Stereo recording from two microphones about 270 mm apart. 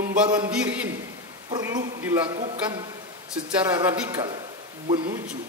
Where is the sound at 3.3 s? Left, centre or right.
Centre.